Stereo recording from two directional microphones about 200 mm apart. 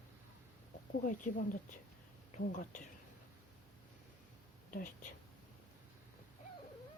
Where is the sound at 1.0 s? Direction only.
40° left (ahead or behind).